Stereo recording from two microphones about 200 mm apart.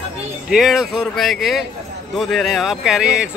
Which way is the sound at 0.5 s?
Centre (ahead or behind).